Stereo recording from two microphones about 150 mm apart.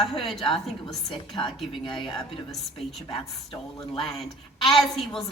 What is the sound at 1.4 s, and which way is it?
Speech, 30° left (ahead or behind).